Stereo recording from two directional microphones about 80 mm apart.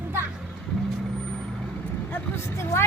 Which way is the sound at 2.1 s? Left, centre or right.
Left.